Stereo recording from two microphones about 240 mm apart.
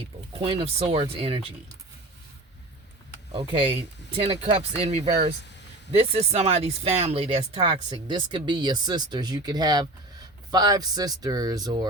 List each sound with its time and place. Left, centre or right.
0.3 s speech: right
3.3 s speech: centre